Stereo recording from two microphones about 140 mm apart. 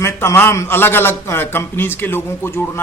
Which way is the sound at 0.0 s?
15° left (ahead or behind).